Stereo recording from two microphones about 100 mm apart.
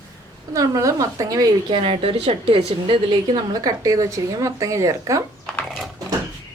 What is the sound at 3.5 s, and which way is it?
Speech, 35° right (ahead or behind).